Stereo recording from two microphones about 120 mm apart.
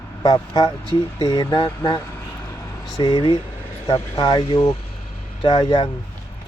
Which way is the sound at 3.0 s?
45° left (ahead or behind).